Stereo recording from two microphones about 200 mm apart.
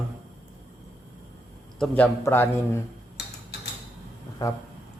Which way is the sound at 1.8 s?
5° left (ahead or behind).